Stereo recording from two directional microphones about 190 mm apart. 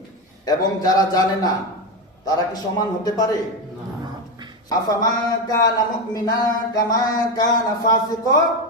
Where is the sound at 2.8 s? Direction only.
20° left (ahead or behind).